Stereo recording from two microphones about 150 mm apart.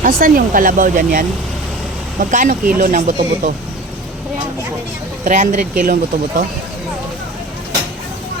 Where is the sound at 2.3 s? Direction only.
60° right (ahead or behind).